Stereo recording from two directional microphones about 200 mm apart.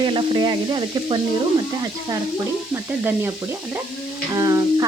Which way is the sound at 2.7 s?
10° right (ahead or behind).